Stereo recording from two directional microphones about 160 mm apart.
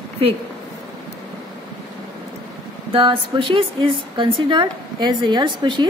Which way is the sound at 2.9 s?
35° right (ahead or behind).